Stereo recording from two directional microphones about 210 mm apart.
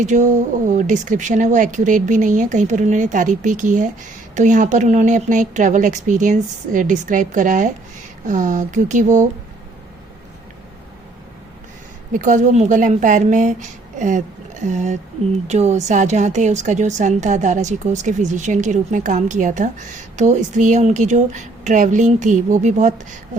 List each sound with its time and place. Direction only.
0.0 s a woman's voice: 35° right (ahead or behind)
12.1 s a woman's voice: 35° right (ahead or behind)